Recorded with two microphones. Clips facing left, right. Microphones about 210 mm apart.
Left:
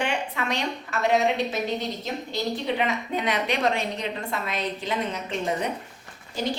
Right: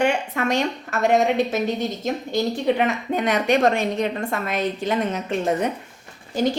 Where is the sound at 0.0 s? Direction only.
45° right (ahead or behind).